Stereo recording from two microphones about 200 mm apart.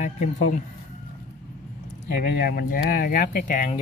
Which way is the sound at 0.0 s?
40° left (ahead or behind).